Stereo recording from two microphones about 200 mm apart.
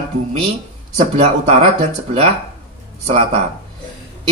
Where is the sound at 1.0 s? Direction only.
30° right (ahead or behind).